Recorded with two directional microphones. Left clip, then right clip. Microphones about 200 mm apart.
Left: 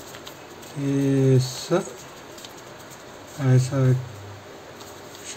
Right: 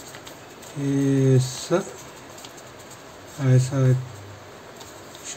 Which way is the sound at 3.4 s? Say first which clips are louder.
Even; centre (ahead or behind).